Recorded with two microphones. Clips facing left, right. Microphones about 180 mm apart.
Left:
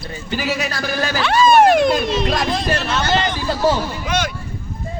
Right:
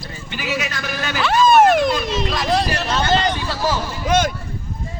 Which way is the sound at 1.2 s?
Centre (ahead or behind).